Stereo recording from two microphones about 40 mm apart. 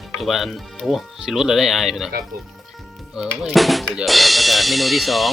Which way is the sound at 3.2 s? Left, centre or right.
Right.